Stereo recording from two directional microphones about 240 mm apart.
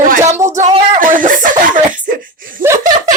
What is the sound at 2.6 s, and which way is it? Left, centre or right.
Speech, centre.